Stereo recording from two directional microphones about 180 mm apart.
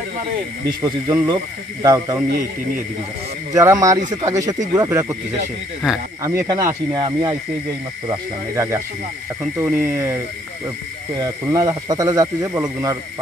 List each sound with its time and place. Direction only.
0.7 s speech: 25° right (ahead or behind)
3.5 s speech: 20° right (ahead or behind)
6.2 s speech: 15° right (ahead or behind)
8.5 s speech: 15° right (ahead or behind)